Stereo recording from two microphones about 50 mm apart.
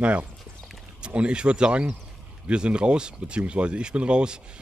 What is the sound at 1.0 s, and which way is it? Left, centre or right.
Speech, right.